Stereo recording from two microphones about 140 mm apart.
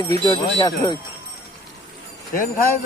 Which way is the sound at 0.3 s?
30° left (ahead or behind).